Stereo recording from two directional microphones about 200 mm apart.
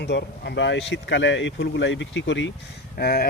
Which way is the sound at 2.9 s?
50° left (ahead or behind).